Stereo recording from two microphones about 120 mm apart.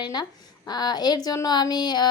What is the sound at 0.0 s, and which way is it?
A woman's voice, 35° left (ahead or behind).